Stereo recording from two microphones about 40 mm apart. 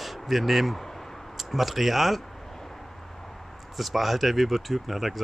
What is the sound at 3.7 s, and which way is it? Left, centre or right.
Speech, centre.